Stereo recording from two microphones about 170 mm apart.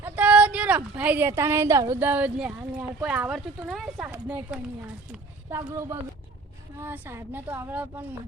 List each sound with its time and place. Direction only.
0.0 s speech: 10° right (ahead or behind)